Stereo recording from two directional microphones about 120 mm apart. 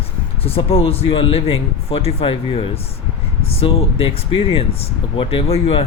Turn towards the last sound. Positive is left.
turn(degrees=55)  # may be behind; listen again after turning